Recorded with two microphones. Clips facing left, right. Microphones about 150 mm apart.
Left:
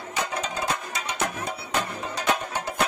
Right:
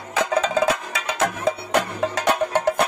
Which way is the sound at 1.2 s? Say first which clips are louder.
Right 9 dB; 85° right.